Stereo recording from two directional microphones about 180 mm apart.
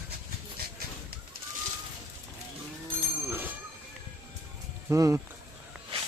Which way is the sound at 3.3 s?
10° right (ahead or behind).